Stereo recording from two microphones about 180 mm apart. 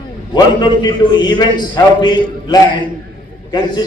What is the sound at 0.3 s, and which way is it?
A man's voice, 25° left (ahead or behind).